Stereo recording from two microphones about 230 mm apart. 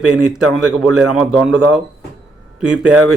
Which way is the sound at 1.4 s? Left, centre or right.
Centre.